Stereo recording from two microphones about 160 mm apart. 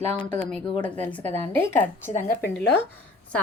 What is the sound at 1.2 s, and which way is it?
Speech, 40° right (ahead or behind).